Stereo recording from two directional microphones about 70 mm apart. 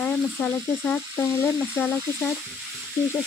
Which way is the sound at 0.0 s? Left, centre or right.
Left.